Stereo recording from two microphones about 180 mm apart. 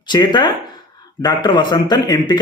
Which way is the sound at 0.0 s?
25° left (ahead or behind).